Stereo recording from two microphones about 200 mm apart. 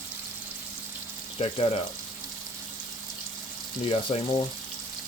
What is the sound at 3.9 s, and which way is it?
Speech, 30° left (ahead or behind).